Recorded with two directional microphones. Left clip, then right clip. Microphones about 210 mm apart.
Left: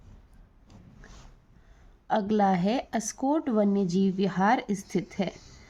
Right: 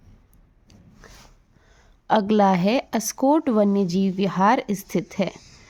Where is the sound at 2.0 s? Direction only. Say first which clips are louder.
Right 6 dB; 40° right (ahead or behind).